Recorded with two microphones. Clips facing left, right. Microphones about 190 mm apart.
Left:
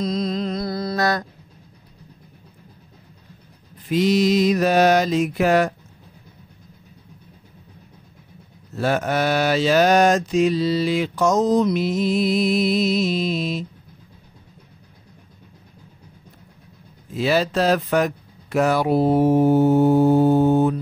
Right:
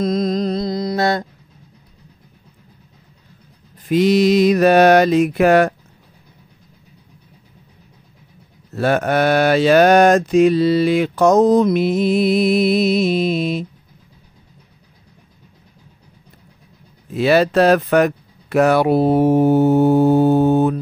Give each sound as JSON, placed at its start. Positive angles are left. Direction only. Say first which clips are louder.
{"t": 0.0, "sound": "music", "louder": "right 5 dB", "side_deg": -50}
{"t": 0.6, "sound": "music", "louder": "right 4 dB", "side_deg": -20}
{"t": 3.9, "sound": "mantra", "louder": "right 4 dB", "side_deg": -60}
{"t": 8.7, "sound": "mantra", "louder": "right 4 dB", "side_deg": -60}
{"t": 17.1, "sound": "speech", "louder": "right 6 dB", "side_deg": -65}